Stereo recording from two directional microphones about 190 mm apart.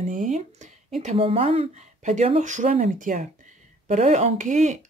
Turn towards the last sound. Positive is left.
turn(degrees=-40)  # may be behind; listen again after turning